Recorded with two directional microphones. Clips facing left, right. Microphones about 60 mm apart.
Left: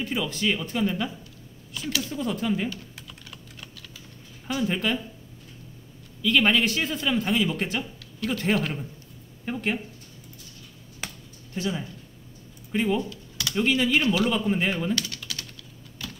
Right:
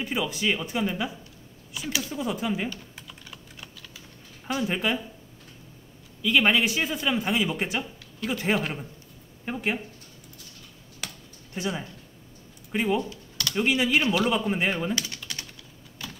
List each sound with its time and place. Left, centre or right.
0.0 s a man's voice: centre
2.7 s typing: centre
4.5 s a man's voice: centre
6.2 s a man's voice: centre
11.0 s a sound: left
11.5 s a man's voice: right
15.2 s typing: right